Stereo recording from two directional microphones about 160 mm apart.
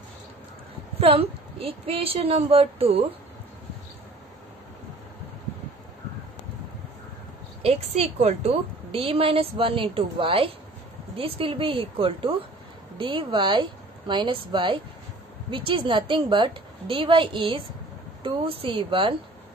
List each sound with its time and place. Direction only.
0.9 s a woman's voice: 35° right (ahead or behind)
7.6 s a woman's voice: 40° right (ahead or behind)